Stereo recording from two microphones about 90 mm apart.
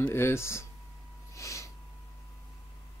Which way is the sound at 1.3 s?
35° left (ahead or behind).